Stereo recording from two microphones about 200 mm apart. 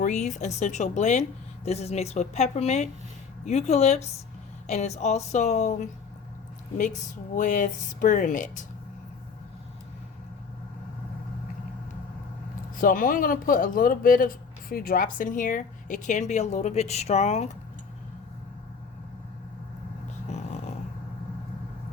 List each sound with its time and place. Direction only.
0.0 s speech: 35° left (ahead or behind)
7.3 s speech: 40° left (ahead or behind)
12.8 s speech: 45° left (ahead or behind)